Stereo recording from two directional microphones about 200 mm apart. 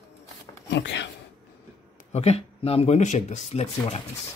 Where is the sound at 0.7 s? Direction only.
60° left (ahead or behind).